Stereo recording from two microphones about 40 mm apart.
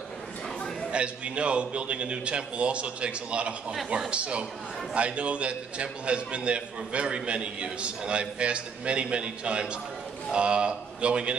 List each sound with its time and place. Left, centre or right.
0.9 s a man's voice: right